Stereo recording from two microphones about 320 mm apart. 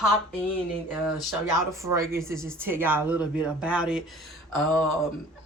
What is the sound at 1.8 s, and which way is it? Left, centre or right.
Speech, centre.